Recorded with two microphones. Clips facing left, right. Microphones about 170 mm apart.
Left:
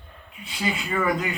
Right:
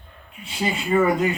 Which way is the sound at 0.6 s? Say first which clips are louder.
Right 6 dB; 25° right (ahead or behind).